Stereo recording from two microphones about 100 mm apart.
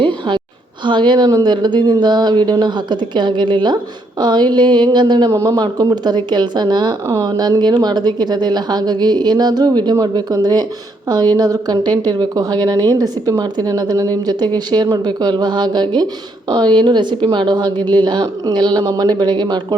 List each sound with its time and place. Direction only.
0.0 s a sound: 55° right (ahead or behind)
0.9 s a woman's voice: 50° right (ahead or behind)
5.3 s a woman's voice: 35° right (ahead or behind)